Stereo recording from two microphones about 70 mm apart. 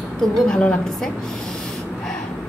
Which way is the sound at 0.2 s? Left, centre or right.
Centre.